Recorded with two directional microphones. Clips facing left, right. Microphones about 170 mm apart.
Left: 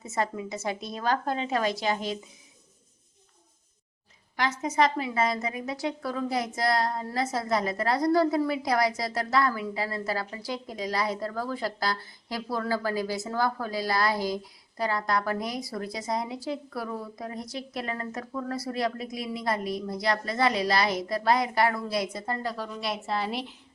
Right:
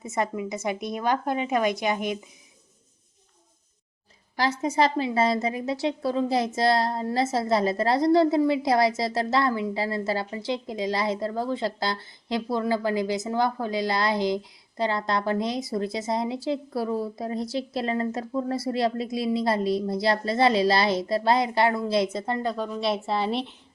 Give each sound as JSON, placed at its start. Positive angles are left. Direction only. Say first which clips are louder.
{"t": 0.0, "sound": "speech", "louder": "right 2 dB", "side_deg": -20}
{"t": 4.4, "sound": "a woman's voice", "louder": "right 2 dB", "side_deg": -30}